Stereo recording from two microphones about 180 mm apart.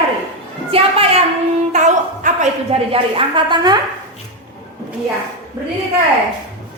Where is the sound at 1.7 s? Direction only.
45° right (ahead or behind).